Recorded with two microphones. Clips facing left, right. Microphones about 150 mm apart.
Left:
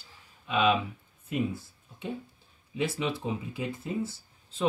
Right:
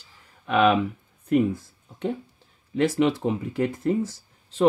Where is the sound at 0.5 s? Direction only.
90° right.